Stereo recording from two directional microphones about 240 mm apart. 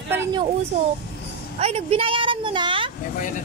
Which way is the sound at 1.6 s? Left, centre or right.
Right.